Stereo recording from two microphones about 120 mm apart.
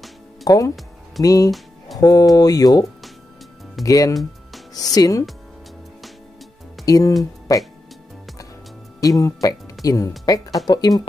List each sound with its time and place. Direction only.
0.5 s speech: 30° left (ahead or behind)
6.9 s speech: 30° left (ahead or behind)
9.2 s speech: 30° left (ahead or behind)